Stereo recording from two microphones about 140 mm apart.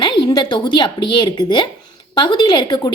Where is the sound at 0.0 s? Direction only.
35° left (ahead or behind).